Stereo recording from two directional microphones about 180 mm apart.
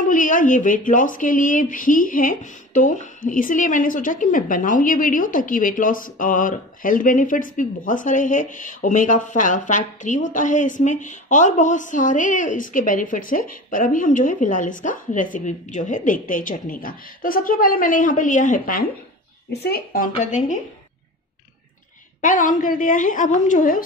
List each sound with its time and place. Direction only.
0.0 s speech: 45° left (ahead or behind)
19.5 s speech: 60° left (ahead or behind); by 20.5 s 45° left (ahead or behind)
22.2 s speech: 45° left (ahead or behind)